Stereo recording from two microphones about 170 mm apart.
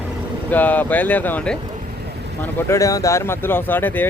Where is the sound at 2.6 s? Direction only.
20° left (ahead or behind).